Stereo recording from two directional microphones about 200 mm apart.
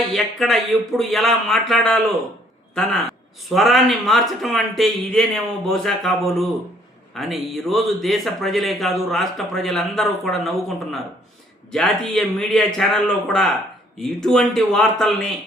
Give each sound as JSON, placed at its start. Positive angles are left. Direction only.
{"t": 0.1, "sound": "speech", "side_deg": 0}